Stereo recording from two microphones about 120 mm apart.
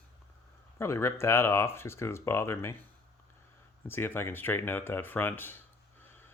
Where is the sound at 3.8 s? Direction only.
20° left (ahead or behind).